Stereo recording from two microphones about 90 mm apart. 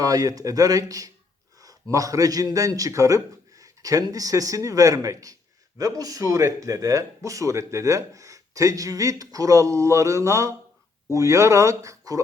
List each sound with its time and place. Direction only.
0.0 s a man's voice: 45° right (ahead or behind)